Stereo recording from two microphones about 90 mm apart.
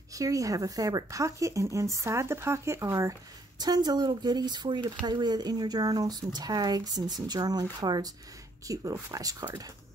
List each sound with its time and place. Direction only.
0.1 s speech: 40° right (ahead or behind)